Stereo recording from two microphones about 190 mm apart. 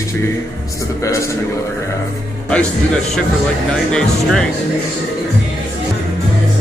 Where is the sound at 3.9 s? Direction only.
5° left (ahead or behind).